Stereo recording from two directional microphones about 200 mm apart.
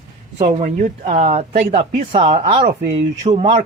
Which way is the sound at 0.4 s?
35° right (ahead or behind).